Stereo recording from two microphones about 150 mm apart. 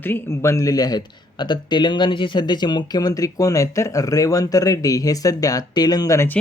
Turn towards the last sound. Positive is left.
turn(degrees=15)  # may be behind; listen again after turning